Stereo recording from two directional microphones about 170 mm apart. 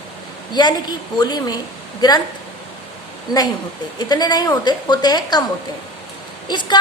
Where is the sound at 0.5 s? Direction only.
25° left (ahead or behind).